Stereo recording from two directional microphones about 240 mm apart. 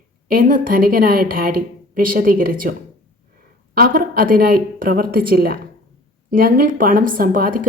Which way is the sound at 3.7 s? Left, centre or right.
Right.